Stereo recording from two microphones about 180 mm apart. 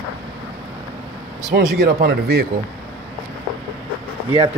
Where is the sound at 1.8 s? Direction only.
60° right (ahead or behind).